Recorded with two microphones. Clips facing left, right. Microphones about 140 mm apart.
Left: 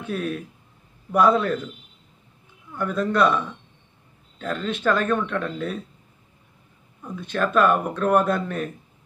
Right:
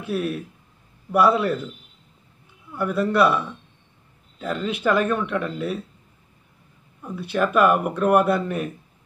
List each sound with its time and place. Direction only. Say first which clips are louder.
0.0 s speech: right 2 dB; 5° right (ahead or behind)
2.7 s speech: right 2 dB; 10° right (ahead or behind)
7.0 s speech: right 2 dB; 10° right (ahead or behind)